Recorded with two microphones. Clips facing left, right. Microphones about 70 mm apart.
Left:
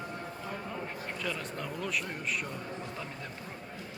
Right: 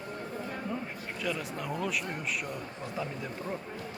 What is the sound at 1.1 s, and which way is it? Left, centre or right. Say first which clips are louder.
A man's voice: right 4 dB; centre.